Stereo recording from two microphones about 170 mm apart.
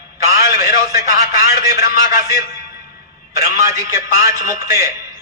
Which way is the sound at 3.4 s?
15° right (ahead or behind).